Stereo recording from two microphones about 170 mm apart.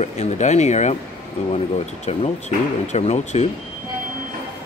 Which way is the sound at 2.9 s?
40° left (ahead or behind).